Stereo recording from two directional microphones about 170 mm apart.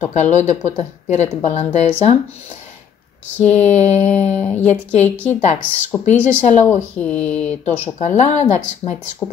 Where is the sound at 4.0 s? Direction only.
10° left (ahead or behind).